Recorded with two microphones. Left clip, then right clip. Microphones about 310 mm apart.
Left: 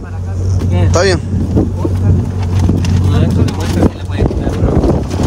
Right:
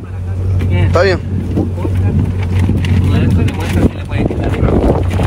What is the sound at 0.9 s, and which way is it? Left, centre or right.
Speech, centre.